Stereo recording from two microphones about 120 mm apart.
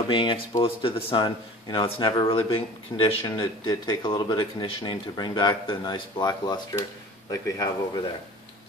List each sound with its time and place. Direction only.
0.1 s speech: 45° left (ahead or behind)
3.3 s speech: 35° left (ahead or behind)